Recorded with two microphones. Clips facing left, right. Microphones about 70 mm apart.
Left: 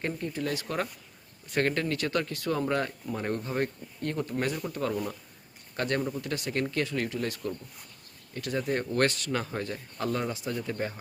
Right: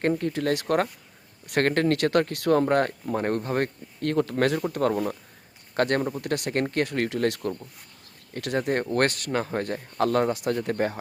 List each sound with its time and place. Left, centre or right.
0.0 s speech: right
7.1 s speech: right
9.3 s speech: right